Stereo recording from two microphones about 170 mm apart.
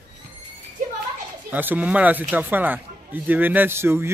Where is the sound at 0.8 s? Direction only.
45° right (ahead or behind).